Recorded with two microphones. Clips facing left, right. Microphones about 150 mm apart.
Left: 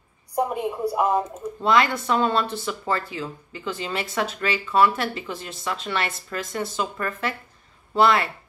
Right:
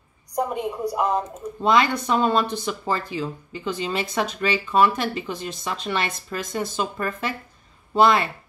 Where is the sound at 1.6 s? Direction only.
15° right (ahead or behind).